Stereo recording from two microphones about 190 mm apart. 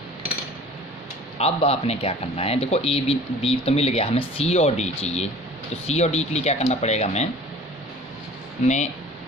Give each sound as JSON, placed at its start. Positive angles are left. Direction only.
{"t": 1.4, "sound": "speech", "side_deg": 35}
{"t": 8.6, "sound": "speech", "side_deg": 40}